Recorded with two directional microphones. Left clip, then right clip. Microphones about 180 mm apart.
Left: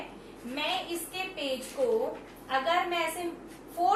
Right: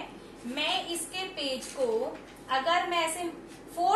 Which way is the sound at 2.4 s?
20° right (ahead or behind).